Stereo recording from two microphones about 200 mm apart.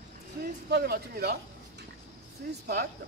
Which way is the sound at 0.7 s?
50° right (ahead or behind).